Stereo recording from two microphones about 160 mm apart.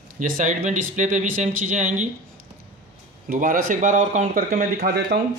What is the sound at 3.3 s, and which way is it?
Speech, 60° right (ahead or behind).